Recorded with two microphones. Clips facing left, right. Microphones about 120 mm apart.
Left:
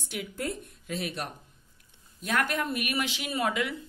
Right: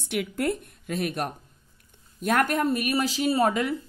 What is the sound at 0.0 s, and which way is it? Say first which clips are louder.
A woman's voice: right 7 dB; 65° right (ahead or behind).